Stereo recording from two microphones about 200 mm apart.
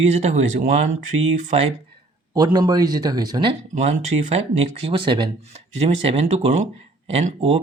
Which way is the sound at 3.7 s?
35° right (ahead or behind).